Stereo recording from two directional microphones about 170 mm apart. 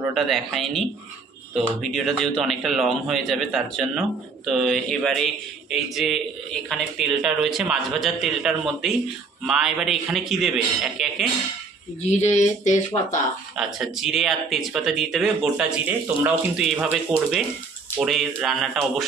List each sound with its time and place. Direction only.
0.1 s a man's voice: centre (ahead or behind)
12.1 s speech: 45° left (ahead or behind)
13.7 s a man's voice: centre (ahead or behind)